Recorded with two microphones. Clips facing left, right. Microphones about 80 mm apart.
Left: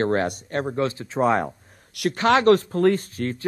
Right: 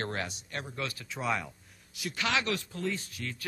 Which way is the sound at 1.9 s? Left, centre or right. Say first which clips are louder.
Left 14 dB; left.